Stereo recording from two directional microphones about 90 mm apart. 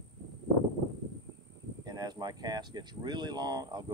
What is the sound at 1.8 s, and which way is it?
Speech, 50° right (ahead or behind).